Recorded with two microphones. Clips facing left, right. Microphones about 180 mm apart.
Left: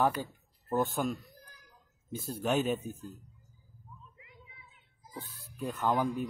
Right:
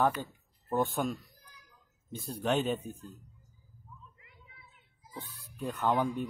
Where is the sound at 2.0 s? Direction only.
Centre (ahead or behind).